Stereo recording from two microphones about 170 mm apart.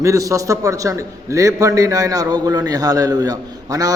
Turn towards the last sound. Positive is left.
turn(degrees=-20)  # may be behind; listen again after turning